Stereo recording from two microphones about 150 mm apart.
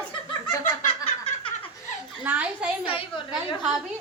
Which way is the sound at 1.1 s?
40° left (ahead or behind).